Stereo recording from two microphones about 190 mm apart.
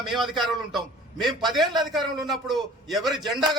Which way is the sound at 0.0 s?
Centre (ahead or behind).